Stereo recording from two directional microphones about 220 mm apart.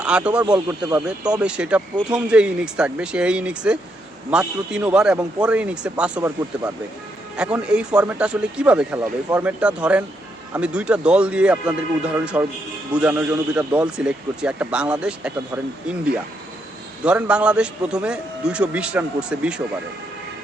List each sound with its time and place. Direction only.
0.0 s a man's voice: 5° right (ahead or behind)
0.4 s speech: 15° right (ahead or behind)
1.4 s a man's voice: 5° right (ahead or behind)